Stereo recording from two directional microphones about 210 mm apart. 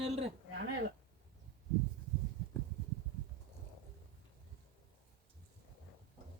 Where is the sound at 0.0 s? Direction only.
30° right (ahead or behind).